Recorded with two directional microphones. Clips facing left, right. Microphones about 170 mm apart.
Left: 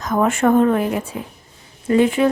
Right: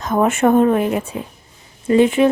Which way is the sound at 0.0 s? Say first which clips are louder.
Right 2 dB; 25° right (ahead or behind).